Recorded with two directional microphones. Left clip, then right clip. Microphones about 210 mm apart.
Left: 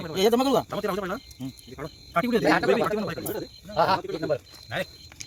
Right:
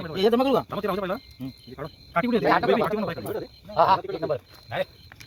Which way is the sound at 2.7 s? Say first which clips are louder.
Right 1 dB; 25° right (ahead or behind).